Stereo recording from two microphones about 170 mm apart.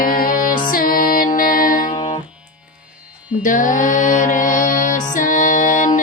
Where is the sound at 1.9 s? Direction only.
35° left (ahead or behind).